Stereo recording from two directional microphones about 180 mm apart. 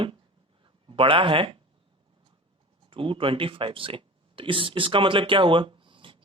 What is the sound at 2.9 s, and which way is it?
Speech, 30° right (ahead or behind).